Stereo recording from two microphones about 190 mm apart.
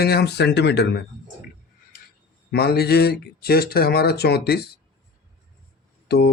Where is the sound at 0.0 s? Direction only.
55° left (ahead or behind).